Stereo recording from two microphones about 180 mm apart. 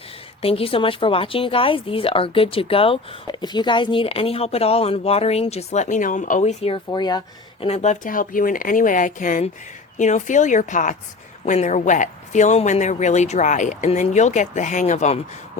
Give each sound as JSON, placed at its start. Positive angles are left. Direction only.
{"t": 0.4, "sound": "speech", "side_deg": 30}
{"t": 7.6, "sound": "speech", "side_deg": 40}